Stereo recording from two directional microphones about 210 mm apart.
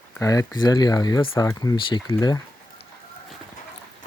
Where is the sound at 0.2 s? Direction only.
15° left (ahead or behind).